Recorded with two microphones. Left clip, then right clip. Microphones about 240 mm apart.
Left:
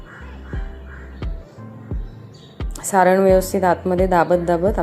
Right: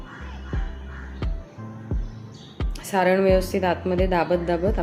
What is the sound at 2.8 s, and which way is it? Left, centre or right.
A woman's voice, centre.